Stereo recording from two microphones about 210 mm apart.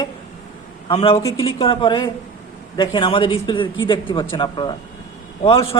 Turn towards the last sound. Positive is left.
turn(degrees=25)  # may be behind; listen again after turning